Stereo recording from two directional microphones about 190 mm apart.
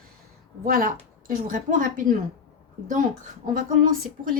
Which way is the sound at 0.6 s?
50° right (ahead or behind).